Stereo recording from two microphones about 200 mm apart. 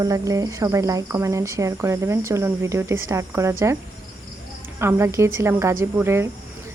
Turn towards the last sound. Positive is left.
turn(degrees=-10)  # may be behind; listen again after turning